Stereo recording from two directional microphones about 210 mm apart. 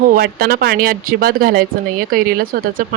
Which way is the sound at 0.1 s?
45° right (ahead or behind).